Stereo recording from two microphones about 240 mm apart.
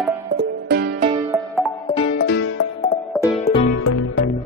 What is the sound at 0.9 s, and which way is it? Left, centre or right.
Music, right.